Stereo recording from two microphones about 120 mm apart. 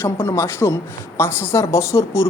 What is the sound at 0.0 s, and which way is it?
Speech, 20° left (ahead or behind).